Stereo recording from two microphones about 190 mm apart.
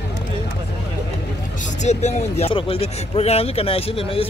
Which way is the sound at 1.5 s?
40° left (ahead or behind).